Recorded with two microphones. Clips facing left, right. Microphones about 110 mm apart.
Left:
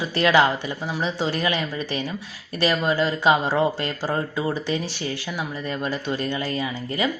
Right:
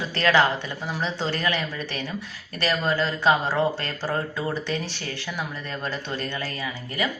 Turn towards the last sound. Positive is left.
turn(degrees=25)  # may be behind; listen again after turning